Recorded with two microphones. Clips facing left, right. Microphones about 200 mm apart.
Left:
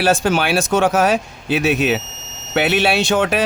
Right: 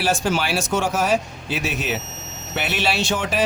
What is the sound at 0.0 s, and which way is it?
Speech, 60° left (ahead or behind).